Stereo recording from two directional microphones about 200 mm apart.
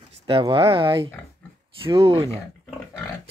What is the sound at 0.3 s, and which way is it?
Speech, 25° right (ahead or behind).